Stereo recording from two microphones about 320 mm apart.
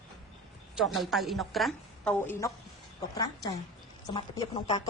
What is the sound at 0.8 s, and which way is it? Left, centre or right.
A woman's voice, centre.